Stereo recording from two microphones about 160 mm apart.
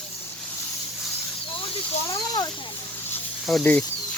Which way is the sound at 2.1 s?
25° left (ahead or behind).